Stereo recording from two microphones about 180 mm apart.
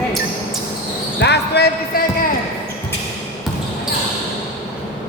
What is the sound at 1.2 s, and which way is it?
Basketball bounce, 70° left (ahead or behind).